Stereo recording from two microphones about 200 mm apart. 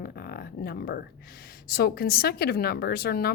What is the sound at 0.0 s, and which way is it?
Music, 50° left (ahead or behind).